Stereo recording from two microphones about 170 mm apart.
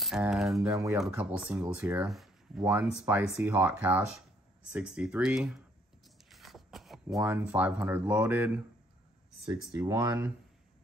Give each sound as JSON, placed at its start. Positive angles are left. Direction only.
{"t": 0.3, "sound": "speech", "side_deg": 0}
{"t": 2.6, "sound": "speech", "side_deg": -10}
{"t": 6.2, "sound": "a sound", "side_deg": 0}
{"t": 7.2, "sound": "speech", "side_deg": -10}
{"t": 9.5, "sound": "speech", "side_deg": -20}